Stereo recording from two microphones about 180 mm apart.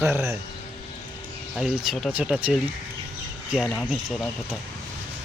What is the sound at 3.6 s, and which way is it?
Speech, 5° left (ahead or behind).